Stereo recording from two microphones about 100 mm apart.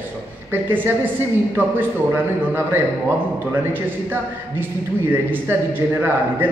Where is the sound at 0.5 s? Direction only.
20° right (ahead or behind).